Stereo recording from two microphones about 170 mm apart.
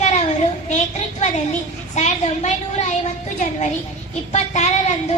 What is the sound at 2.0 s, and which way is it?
A woman's voice, 45° left (ahead or behind).